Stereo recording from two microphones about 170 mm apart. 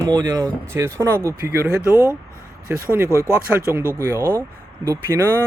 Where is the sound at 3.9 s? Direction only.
20° right (ahead or behind).